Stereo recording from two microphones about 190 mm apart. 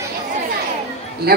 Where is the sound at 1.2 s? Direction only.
55° right (ahead or behind).